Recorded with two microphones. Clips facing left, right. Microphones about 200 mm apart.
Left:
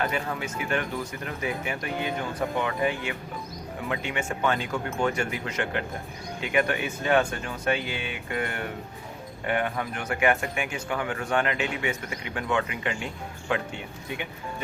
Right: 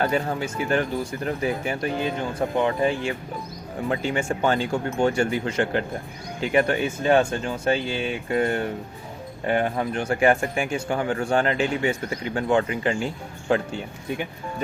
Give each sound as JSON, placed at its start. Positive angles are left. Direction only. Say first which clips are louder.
{"t": 0.0, "sound": "speech", "louder": "right 5 dB", "side_deg": -35}